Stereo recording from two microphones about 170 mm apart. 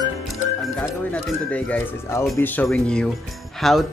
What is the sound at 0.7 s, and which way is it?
Speech, 10° left (ahead or behind).